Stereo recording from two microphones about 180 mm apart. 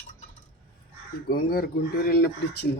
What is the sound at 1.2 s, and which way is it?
Speech, 55° left (ahead or behind).